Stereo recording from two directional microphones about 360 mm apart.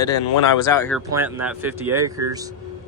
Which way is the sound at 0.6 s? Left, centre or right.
Centre.